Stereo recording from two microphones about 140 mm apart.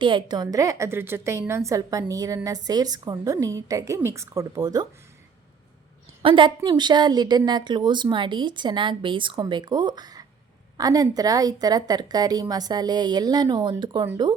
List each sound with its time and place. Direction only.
0.0 s a woman's voice: 35° right (ahead or behind)
6.2 s a woman's voice: 35° right (ahead or behind)